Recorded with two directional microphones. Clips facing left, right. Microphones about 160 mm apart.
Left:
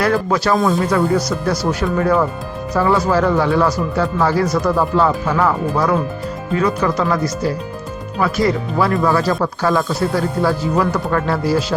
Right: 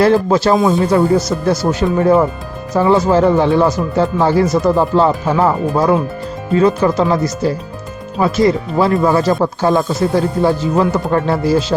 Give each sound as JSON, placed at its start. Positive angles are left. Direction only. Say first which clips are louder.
{"t": 0.0, "sound": "speech", "louder": "right 5 dB", "side_deg": -25}